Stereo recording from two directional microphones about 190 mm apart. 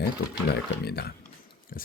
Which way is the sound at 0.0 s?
55° left (ahead or behind).